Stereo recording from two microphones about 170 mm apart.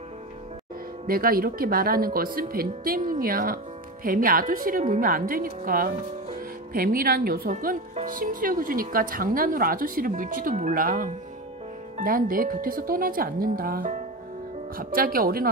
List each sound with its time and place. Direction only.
1.0 s speech: 60° right (ahead or behind)